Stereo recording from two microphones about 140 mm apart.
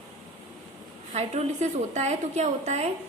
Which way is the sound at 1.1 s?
50° right (ahead or behind).